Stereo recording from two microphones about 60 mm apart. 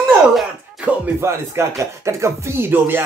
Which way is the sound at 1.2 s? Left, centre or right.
Right.